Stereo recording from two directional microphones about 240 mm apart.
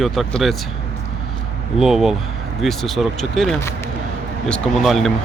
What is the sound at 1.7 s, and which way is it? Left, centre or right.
Speech, centre.